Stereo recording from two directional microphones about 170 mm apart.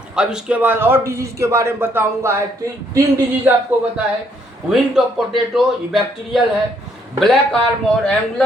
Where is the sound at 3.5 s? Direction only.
10° right (ahead or behind).